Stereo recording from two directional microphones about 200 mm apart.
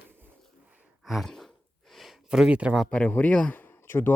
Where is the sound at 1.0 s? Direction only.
Centre (ahead or behind).